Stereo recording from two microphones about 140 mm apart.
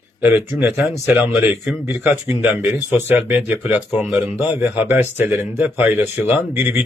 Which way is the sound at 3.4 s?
5° right (ahead or behind).